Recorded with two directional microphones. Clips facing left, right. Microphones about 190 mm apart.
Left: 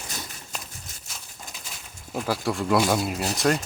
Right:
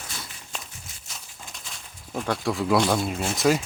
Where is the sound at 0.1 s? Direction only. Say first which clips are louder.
Left 3 dB; 40° left (ahead or behind).